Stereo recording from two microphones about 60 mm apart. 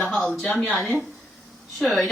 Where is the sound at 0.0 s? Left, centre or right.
Centre.